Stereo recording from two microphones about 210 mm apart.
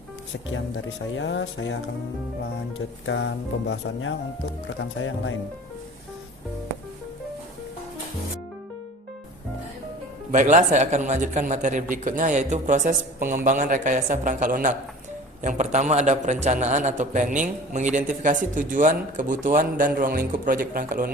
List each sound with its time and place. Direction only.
0.4 s speech: 65° left (ahead or behind)
10.3 s a man's voice: 35° right (ahead or behind)